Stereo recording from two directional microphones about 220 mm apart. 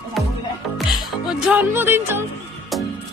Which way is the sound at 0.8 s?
Centre (ahead or behind).